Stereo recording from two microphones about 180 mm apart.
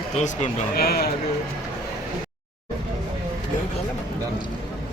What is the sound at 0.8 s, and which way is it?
Speech, 60° left (ahead or behind).